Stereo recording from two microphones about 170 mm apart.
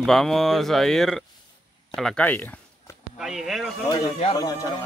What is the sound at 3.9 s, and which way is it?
Speech, 25° left (ahead or behind).